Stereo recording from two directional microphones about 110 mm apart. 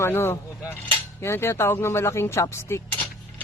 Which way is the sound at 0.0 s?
25° left (ahead or behind).